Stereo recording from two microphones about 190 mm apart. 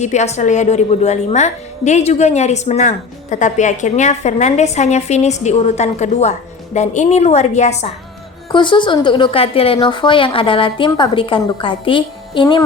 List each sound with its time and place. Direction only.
0.0 s a woman's voice: 35° left (ahead or behind)
8.5 s a woman's voice: 25° left (ahead or behind)